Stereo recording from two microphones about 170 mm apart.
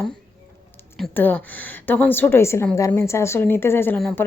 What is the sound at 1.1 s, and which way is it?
Speech, 10° left (ahead or behind).